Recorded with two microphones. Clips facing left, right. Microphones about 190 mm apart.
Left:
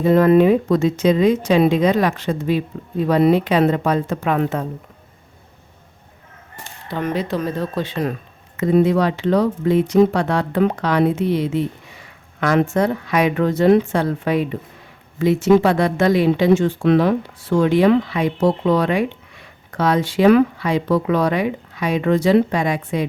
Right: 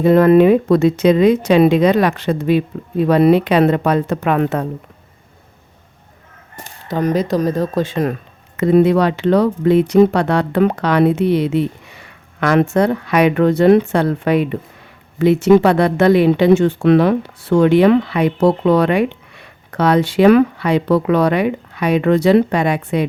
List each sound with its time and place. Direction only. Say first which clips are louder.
0.0 s speech: right 3 dB; 65° right (ahead or behind)
6.8 s speech: right 5 dB; 40° right (ahead or behind)
8.5 s speech: right 4 dB; 70° right (ahead or behind)